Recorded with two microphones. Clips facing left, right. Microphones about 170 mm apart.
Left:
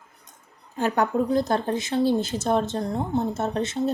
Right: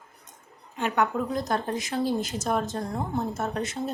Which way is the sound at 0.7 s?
35° left (ahead or behind).